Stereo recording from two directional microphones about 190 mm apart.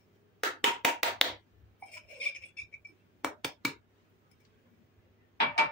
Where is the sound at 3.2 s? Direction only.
Centre (ahead or behind).